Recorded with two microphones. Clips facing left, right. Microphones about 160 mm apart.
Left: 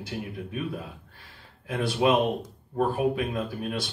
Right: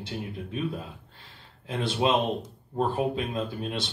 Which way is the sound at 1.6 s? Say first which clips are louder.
Left 2 dB; 25° right (ahead or behind).